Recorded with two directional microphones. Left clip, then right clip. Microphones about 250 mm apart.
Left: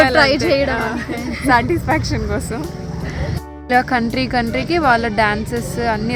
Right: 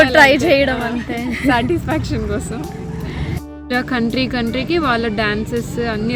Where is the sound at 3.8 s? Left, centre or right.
Centre.